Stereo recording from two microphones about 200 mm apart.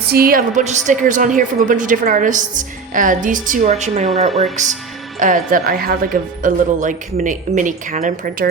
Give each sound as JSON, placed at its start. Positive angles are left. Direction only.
{"t": 0.1, "sound": "a woman's voice", "side_deg": -50}